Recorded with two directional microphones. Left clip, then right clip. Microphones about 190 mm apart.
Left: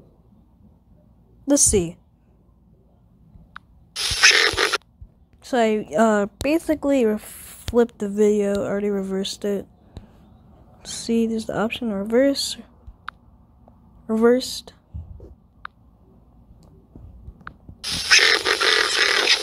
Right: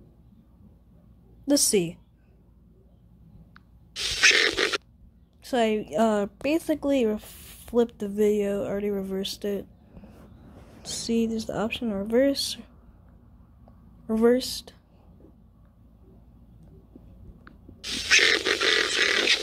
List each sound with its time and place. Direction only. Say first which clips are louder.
1.4 s a woman's voice: left 4 dB; 10° left (ahead or behind)
3.5 s a sound: left 5 dB; 5° left (ahead or behind)
5.4 s a woman's voice: left 4 dB; 10° left (ahead or behind)
10.8 s a woman's voice: left 4 dB; 15° left (ahead or behind)
14.0 s a woman's voice: left 4 dB; 10° left (ahead or behind)
17.5 s a sound: left 5 dB; 5° left (ahead or behind)